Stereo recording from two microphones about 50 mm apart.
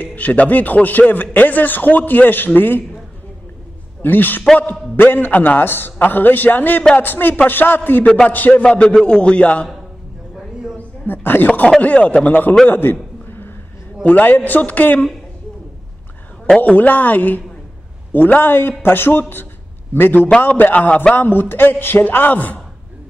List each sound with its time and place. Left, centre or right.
0.0 s a man's voice: left
4.0 s a man's voice: left
9.0 s speech: left
11.1 s a man's voice: left
12.6 s a man's voice: left
14.0 s a man's voice: left
16.5 s a man's voice: left